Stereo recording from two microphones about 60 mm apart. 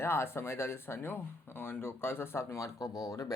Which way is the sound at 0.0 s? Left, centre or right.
Left.